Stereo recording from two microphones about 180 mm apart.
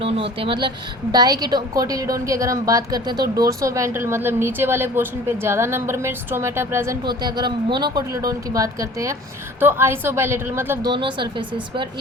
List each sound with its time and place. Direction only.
0.0 s a woman's voice: 30° right (ahead or behind); by 10.9 s 15° right (ahead or behind)
10.9 s a woman's voice: 25° right (ahead or behind)